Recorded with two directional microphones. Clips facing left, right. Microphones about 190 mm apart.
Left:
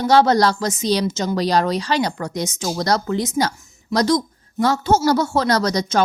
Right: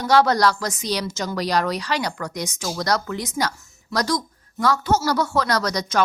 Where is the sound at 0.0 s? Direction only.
25° left (ahead or behind).